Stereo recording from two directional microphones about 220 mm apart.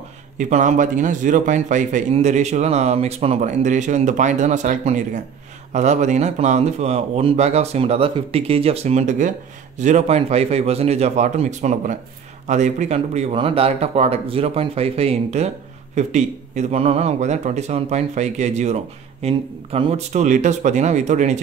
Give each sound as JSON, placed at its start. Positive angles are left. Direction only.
{"t": 0.4, "sound": "speech", "side_deg": -35}